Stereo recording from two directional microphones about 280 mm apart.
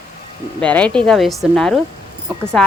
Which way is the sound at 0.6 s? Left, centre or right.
Centre.